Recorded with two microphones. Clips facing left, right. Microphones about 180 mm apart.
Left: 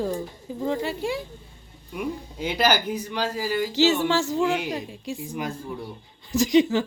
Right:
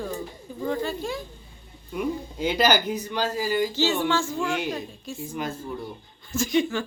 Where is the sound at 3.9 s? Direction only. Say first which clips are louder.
Left 2 dB; 40° left (ahead or behind).